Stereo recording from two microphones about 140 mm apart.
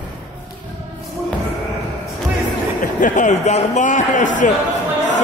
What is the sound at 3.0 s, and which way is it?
Speech, 65° left (ahead or behind).